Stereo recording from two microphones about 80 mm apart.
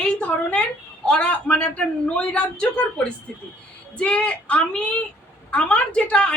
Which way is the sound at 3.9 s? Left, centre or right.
Centre.